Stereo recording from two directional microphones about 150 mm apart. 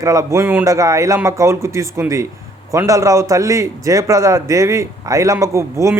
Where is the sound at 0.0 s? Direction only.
20° right (ahead or behind).